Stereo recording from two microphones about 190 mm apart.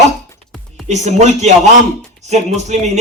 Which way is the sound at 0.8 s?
40° right (ahead or behind).